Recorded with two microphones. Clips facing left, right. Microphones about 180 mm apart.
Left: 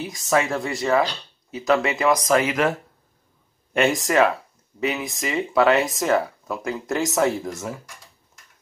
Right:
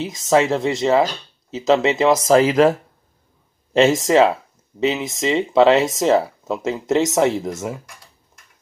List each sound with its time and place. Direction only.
0.0 s speech: 25° right (ahead or behind)
4.0 s speech: 25° right (ahead or behind)